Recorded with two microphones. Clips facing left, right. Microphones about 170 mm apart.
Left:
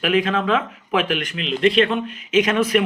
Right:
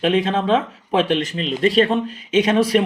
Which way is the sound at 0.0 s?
30° right (ahead or behind).